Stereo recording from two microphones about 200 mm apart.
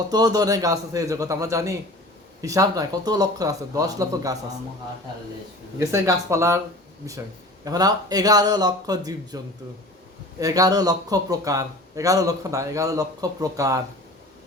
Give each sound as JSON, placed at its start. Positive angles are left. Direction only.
{"t": 0.1, "sound": "a man's voice", "side_deg": -20}
{"t": 5.8, "sound": "a man's voice", "side_deg": -15}
{"t": 7.6, "sound": "speech", "side_deg": -20}
{"t": 10.4, "sound": "a man's voice", "side_deg": -20}